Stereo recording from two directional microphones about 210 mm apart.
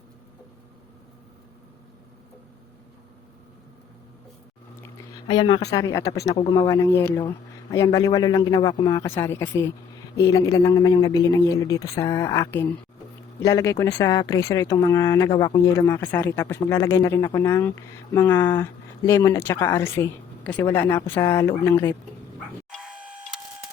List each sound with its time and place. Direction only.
5.3 s speech: 20° left (ahead or behind)
22.7 s printer: 5° right (ahead or behind)